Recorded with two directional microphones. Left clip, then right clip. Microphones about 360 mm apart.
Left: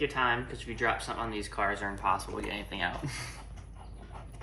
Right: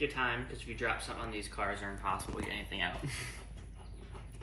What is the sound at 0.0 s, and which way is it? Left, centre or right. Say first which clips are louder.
Speech: left 5 dB; centre.